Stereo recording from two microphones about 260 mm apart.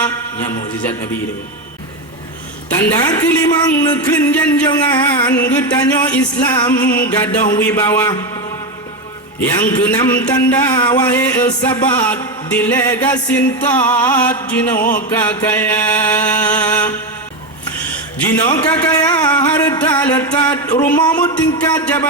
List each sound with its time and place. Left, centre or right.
0.0 s music: centre
2.7 s speech: centre
9.4 s speech: centre
14.8 s music: left
15.1 s speech: centre
18.3 s speech: centre